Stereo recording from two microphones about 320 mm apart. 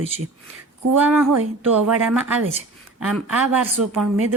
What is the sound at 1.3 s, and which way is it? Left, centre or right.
Speech, right.